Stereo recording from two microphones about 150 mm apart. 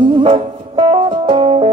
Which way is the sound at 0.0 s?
35° right (ahead or behind).